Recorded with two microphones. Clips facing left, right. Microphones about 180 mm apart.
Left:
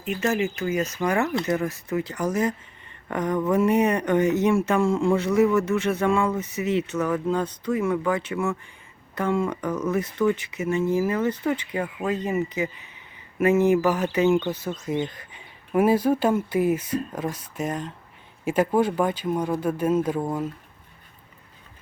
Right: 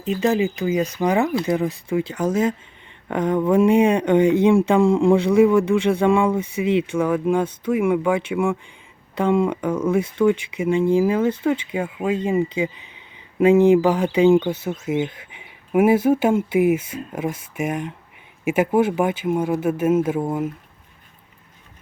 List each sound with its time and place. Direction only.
0.2 s speech: 15° right (ahead or behind)
2.1 s speech: 25° right (ahead or behind)
3.1 s speech: 10° right (ahead or behind)
13.4 s speech: 15° right (ahead or behind)